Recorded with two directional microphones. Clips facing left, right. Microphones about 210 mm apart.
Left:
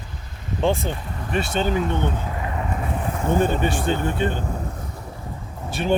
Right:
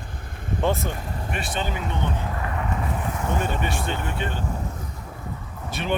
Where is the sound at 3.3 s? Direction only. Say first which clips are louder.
Left 7 dB; 35° left (ahead or behind).